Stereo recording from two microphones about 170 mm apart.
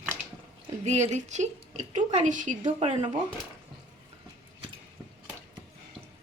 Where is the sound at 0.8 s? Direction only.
40° right (ahead or behind).